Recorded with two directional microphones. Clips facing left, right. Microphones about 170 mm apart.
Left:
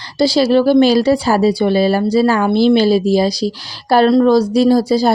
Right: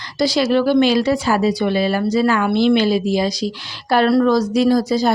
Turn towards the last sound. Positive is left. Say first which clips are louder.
# left 3 dB
turn(degrees=30)  # may be behind; listen again after turning